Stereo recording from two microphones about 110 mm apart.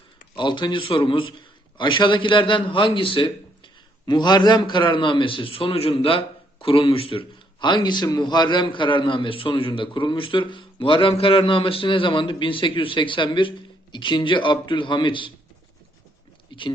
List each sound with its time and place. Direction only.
0.3 s a man's voice: 45° left (ahead or behind)
16.5 s speech: 45° left (ahead or behind)